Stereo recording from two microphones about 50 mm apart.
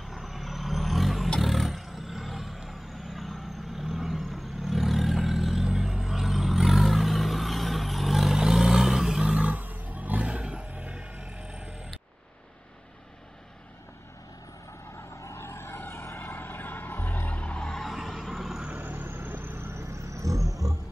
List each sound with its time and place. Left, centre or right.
0.0 s vehicle: centre
9.3 s a sound: right
10.7 s vehicle: right
15.1 s vehicle: left
16.3 s vehicle: left
17.6 s vehicle: centre
17.8 s a sound: centre
18.3 s vehicle: centre
18.7 s vehicle: right